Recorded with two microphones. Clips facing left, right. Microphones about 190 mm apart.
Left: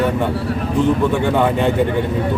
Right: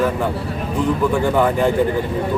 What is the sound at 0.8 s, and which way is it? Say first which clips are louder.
Speech: even; 25° left (ahead or behind).